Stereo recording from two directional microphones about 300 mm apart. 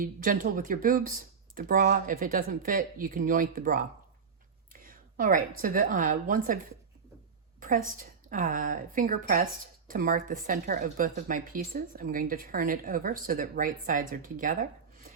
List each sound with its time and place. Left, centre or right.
0.0 s a woman's voice: right
7.9 s speech: right